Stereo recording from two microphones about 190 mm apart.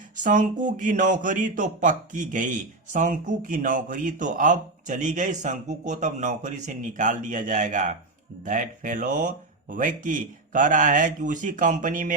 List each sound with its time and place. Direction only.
0.2 s speech: 40° right (ahead or behind)